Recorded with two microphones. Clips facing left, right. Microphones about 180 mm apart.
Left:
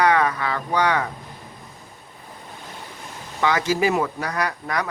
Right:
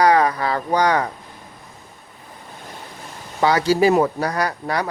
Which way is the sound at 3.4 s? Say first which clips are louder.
Right 5 dB; 35° right (ahead or behind).